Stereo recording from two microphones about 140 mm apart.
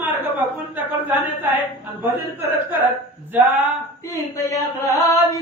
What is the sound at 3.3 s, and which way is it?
Speech, 10° right (ahead or behind).